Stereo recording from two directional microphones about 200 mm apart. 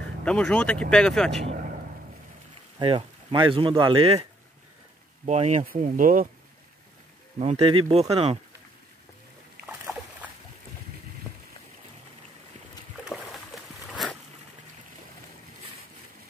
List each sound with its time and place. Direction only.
0.2 s speech: 5° left (ahead or behind)
1.4 s a man's voice: 35° right (ahead or behind)
2.8 s speech: 25° right (ahead or behind)
7.3 s speech: 30° right (ahead or behind)
9.7 s dog: 10° right (ahead or behind)
13.1 s a sound: centre (ahead or behind)